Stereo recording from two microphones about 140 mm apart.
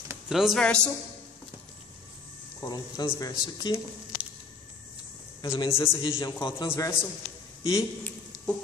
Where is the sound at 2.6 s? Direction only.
25° left (ahead or behind).